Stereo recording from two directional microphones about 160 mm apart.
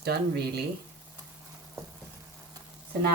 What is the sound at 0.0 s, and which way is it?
Speech, 80° right.